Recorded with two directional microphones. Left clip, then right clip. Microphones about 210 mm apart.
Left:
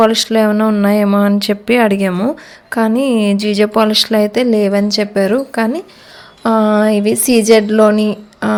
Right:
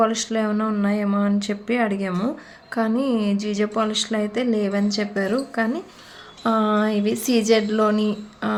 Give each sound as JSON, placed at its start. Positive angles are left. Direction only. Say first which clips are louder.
{"t": 0.0, "sound": "speech", "louder": "left 10 dB", "side_deg": 40}